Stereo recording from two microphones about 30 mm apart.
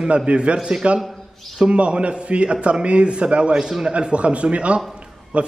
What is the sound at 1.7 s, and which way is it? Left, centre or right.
A man's voice, right.